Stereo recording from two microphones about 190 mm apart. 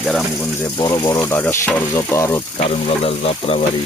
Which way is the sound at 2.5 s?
30° left (ahead or behind).